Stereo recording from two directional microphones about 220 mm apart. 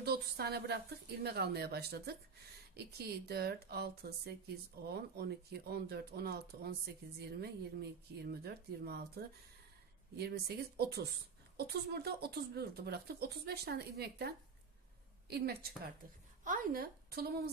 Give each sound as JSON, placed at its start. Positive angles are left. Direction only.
{"t": 0.0, "sound": "a woman's voice", "side_deg": -45}